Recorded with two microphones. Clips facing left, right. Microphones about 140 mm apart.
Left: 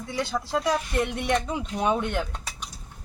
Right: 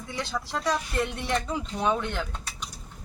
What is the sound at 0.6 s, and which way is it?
Speech, 5° left (ahead or behind).